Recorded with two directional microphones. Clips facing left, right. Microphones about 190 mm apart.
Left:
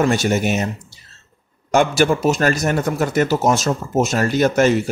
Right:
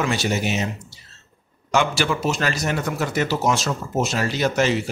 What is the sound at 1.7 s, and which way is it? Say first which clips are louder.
Speech: left 6 dB; 50° left (ahead or behind).